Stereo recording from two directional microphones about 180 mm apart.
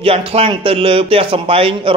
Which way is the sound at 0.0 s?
30° right (ahead or behind).